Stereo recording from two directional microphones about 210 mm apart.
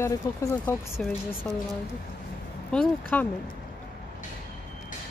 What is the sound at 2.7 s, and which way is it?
Speech, 10° left (ahead or behind).